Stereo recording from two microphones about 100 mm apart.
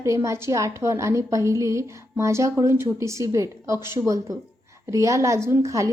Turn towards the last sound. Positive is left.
turn(degrees=-30)  # may be behind; listen again after turning